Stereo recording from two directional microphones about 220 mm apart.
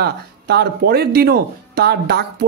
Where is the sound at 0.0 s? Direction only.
45° right (ahead or behind).